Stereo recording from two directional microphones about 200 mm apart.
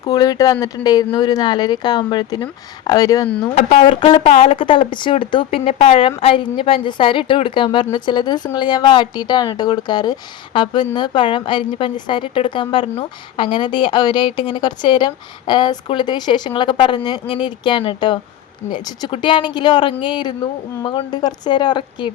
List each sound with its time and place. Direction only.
0.0 s a woman's voice: 20° left (ahead or behind)
3.4 s a woman's voice: 30° left (ahead or behind)
4.3 s a woman's voice: 40° left (ahead or behind)
4.5 s a woman's voice: 25° left (ahead or behind)